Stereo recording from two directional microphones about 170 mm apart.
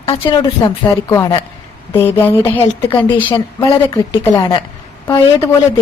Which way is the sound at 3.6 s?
25° left (ahead or behind).